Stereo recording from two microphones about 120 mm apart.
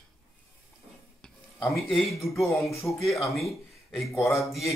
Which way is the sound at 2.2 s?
Centre (ahead or behind).